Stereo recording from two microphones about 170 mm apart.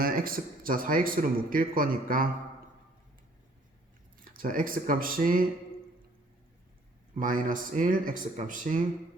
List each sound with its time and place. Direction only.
0.0 s speech: 55° right (ahead or behind)
4.2 s speech: 55° right (ahead or behind)
7.2 s speech: 50° right (ahead or behind)